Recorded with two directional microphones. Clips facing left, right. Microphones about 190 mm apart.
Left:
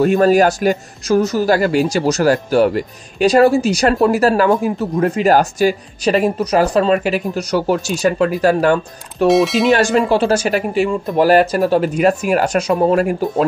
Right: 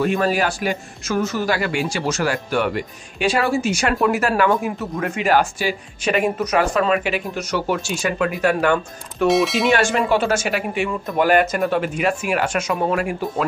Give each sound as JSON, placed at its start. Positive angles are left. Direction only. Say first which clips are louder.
{"t": 0.0, "sound": "a man's voice", "louder": "left 8 dB", "side_deg": 40}
{"t": 9.3, "sound": "speech", "louder": "left 5 dB", "side_deg": 0}
{"t": 9.7, "sound": "a man's voice", "louder": "left 4 dB", "side_deg": 40}